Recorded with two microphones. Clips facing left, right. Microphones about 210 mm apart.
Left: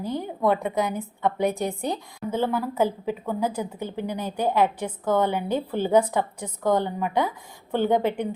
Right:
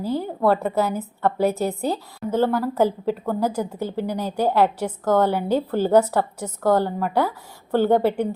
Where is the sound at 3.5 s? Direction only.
10° right (ahead or behind).